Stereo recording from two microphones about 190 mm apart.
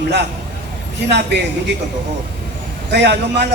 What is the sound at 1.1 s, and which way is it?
Speech, 65° right (ahead or behind).